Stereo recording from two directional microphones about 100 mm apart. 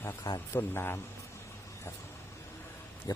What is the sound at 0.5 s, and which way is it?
Speech, 20° left (ahead or behind).